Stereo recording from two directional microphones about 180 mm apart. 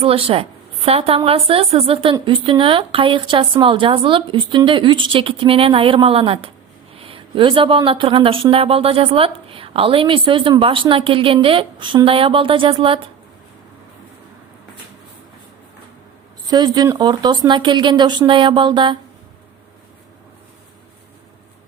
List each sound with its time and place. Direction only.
0.0 s a woman's voice: 30° right (ahead or behind)
16.5 s speech: 25° right (ahead or behind)